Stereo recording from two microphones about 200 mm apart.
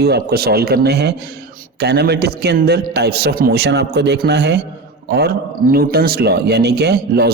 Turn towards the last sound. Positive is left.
turn(degrees=-55)  # may be behind; listen again after turning